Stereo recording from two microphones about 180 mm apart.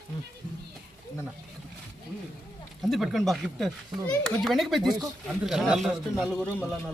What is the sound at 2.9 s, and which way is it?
A man's voice, centre (ahead or behind).